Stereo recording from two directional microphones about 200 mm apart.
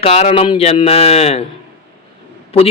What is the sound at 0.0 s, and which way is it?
Speech, 30° left (ahead or behind).